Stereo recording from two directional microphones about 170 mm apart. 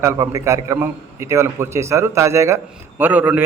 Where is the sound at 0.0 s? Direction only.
15° right (ahead or behind).